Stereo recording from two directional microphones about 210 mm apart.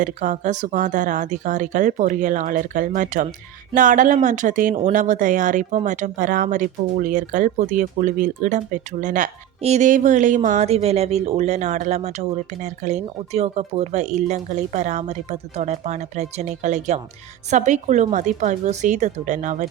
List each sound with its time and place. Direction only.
0.0 s speech: 35° right (ahead or behind)